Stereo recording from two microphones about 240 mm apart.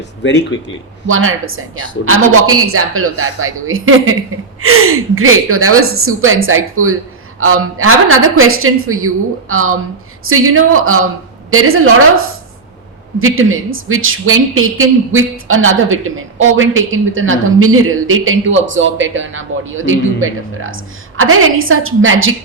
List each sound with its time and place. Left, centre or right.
0.2 s speech: left
1.0 s speech: right